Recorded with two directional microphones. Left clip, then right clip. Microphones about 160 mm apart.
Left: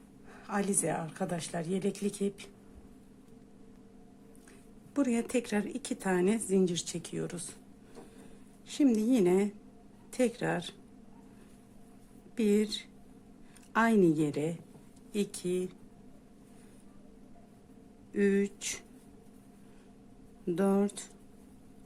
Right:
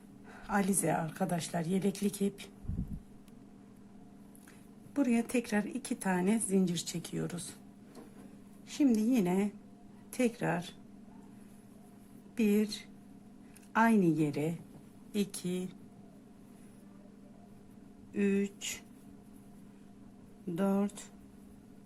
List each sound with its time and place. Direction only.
0.4 s a woman's voice: centre (ahead or behind)
4.9 s a woman's voice: 10° left (ahead or behind)
8.7 s a woman's voice: 10° left (ahead or behind)
12.4 s a woman's voice: 10° left (ahead or behind)
18.1 s speech: 20° left (ahead or behind)
20.6 s speech: 20° left (ahead or behind)